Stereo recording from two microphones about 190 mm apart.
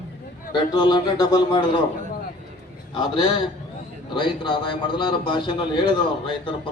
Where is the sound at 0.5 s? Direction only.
25° left (ahead or behind).